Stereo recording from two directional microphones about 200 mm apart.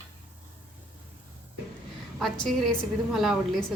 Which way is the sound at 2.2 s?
Centre (ahead or behind).